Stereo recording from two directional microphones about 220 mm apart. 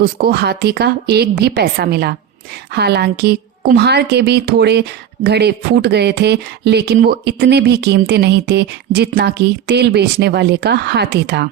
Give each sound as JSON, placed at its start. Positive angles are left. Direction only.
{"t": 0.0, "sound": "speech", "side_deg": -45}